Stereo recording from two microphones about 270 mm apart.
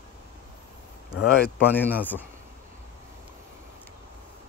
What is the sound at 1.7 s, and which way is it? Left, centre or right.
Speech, centre.